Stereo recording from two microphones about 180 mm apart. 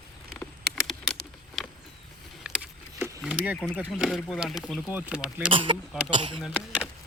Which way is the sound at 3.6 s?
Centre (ahead or behind).